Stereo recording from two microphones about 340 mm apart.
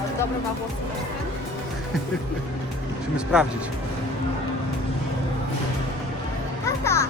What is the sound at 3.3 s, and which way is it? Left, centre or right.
Speech, centre.